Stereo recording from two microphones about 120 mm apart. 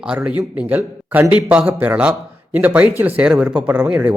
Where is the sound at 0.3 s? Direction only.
10° right (ahead or behind).